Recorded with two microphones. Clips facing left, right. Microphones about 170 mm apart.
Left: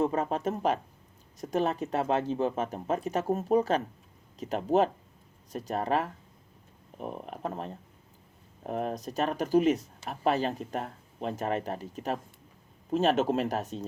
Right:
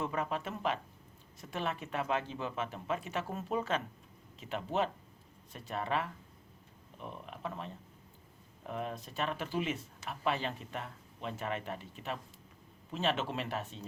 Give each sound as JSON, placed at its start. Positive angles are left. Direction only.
{"t": 0.0, "sound": "speech", "side_deg": 40}